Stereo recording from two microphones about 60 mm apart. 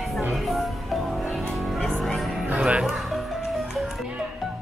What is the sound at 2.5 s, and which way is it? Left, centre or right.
Music, centre.